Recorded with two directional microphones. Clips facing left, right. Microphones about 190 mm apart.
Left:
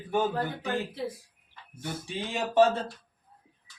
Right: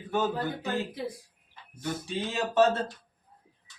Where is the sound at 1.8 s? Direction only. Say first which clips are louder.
Right 3 dB; 15° left (ahead or behind).